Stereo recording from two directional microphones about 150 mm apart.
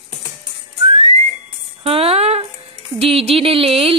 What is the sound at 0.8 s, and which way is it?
Whistling, 40° right (ahead or behind).